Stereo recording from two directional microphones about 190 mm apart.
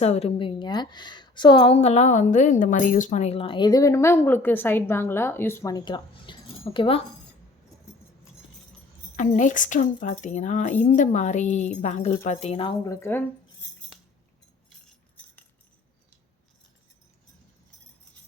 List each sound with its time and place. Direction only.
0.0 s a woman's voice: 35° left (ahead or behind)
9.1 s a woman's voice: 40° left (ahead or behind); by 13.2 s 10° left (ahead or behind)